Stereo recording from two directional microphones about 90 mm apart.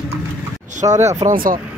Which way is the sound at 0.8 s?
50° right (ahead or behind).